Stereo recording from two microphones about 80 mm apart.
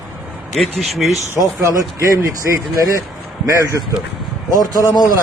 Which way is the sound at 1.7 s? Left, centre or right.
Right.